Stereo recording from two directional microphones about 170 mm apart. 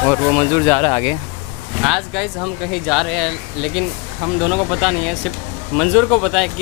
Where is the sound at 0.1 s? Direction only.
20° left (ahead or behind).